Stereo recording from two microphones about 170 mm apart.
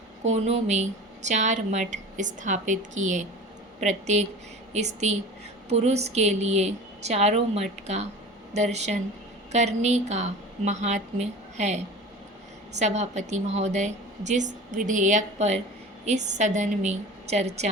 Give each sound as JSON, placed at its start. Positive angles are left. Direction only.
{"t": 0.3, "sound": "a woman's voice", "side_deg": -40}
{"t": 12.8, "sound": "a woman's voice", "side_deg": -40}